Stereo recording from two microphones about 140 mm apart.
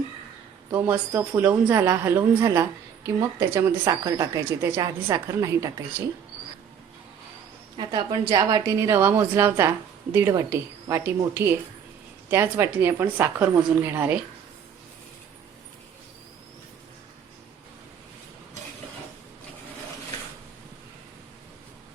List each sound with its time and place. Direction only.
0.7 s a woman's voice: 15° right (ahead or behind)
7.8 s a woman's voice: 35° right (ahead or behind); by 14.2 s 10° right (ahead or behind)